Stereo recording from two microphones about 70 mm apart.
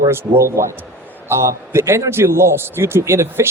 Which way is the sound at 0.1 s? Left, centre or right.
Right.